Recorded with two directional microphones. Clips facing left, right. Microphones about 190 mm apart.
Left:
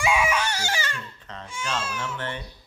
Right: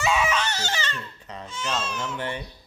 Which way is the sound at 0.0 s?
10° left (ahead or behind).